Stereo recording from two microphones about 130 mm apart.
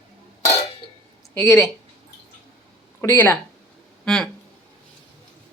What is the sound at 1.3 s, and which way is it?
Speech, 20° left (ahead or behind).